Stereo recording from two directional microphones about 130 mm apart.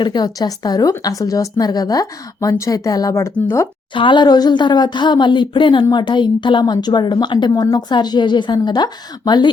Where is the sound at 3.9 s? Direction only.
40° left (ahead or behind).